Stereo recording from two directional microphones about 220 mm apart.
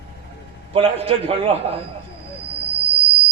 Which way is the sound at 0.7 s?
25° right (ahead or behind).